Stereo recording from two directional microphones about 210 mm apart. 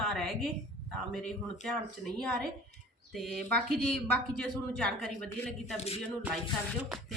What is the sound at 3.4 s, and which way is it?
Speech, centre (ahead or behind).